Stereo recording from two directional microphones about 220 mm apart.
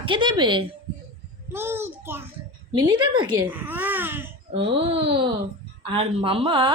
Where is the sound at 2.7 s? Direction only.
20° right (ahead or behind).